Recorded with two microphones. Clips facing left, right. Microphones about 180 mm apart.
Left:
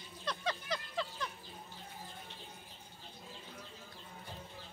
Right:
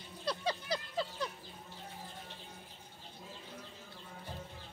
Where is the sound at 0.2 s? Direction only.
35° right (ahead or behind).